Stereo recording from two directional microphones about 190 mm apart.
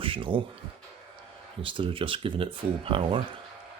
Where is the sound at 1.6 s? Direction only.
25° right (ahead or behind).